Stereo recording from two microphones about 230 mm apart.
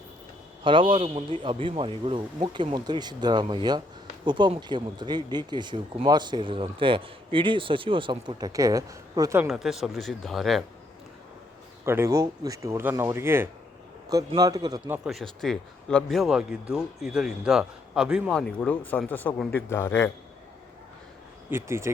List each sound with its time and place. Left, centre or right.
0.6 s speech: right
9.5 s a man's voice: centre
11.9 s a man's voice: centre
21.5 s speech: centre